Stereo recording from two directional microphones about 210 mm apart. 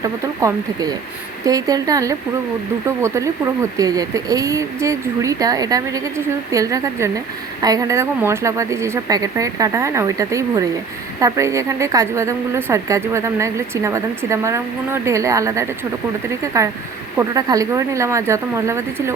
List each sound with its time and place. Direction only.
0.0 s a woman's voice: 15° right (ahead or behind)